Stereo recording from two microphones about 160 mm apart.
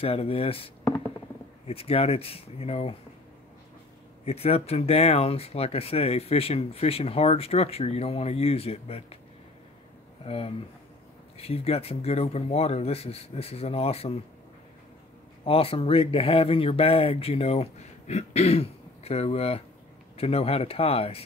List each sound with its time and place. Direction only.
0.0 s speech: 35° left (ahead or behind)
4.2 s speech: 40° left (ahead or behind)
10.2 s speech: 35° left (ahead or behind)
15.4 s speech: 35° left (ahead or behind)